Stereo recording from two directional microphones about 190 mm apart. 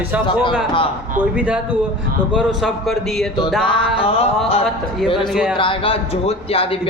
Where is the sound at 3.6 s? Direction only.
30° left (ahead or behind).